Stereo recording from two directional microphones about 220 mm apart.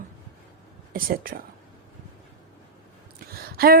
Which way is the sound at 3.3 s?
45° right (ahead or behind).